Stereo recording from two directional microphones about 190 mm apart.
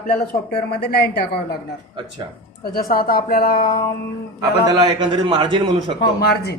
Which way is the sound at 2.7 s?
50° left (ahead or behind).